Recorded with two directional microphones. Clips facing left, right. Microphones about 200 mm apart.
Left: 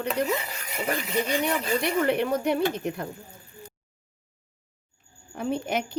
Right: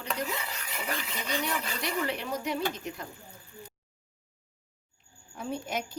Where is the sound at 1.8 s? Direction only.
60° left (ahead or behind).